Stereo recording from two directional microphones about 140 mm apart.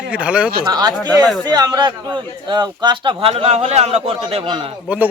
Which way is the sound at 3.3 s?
50° right (ahead or behind).